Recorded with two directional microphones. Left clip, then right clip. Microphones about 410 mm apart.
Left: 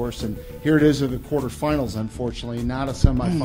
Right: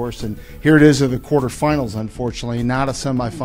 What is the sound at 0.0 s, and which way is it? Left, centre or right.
Speech, right.